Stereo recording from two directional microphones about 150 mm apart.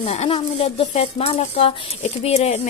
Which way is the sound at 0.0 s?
40° left (ahead or behind).